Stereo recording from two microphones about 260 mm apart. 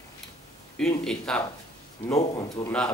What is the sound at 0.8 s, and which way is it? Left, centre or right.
Speech, centre.